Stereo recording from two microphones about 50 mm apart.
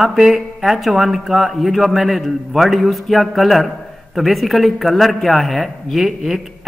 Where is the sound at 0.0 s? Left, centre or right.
Centre.